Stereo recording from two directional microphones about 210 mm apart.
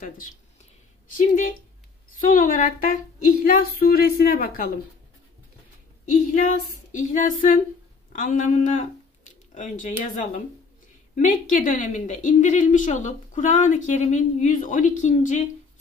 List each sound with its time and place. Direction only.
1.1 s a woman's voice: 40° left (ahead or behind)
6.3 s a woman's voice: 35° left (ahead or behind)